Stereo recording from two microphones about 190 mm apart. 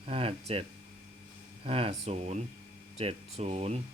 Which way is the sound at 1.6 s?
30° right (ahead or behind).